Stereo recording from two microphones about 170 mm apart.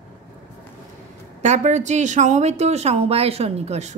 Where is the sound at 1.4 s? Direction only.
45° right (ahead or behind).